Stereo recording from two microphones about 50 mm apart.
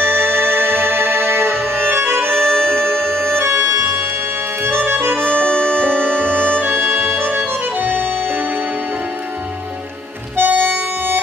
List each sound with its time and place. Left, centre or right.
0.0 s music: right
2.3 s music: centre
3.3 s music: right
4.6 s music: right
5.2 s accordion: centre
6.5 s music: right
10.3 s harmonica: right